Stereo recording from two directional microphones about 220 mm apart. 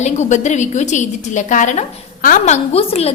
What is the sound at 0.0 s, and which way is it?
A woman's voice, 30° left (ahead or behind).